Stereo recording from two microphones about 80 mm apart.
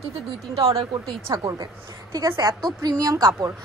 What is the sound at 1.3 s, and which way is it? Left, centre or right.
A woman's voice, right.